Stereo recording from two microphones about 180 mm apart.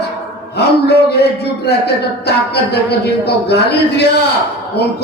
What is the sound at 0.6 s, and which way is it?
Speech, 65° left (ahead or behind).